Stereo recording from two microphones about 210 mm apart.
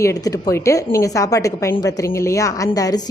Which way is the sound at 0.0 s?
15° left (ahead or behind).